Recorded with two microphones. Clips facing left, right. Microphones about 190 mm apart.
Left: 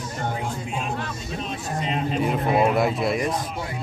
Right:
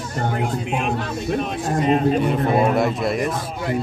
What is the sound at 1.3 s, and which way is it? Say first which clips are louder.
Speech: right 10 dB; 50° right (ahead or behind).